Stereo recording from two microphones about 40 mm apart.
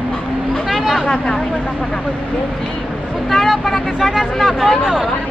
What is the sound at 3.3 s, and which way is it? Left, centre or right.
Speech, centre.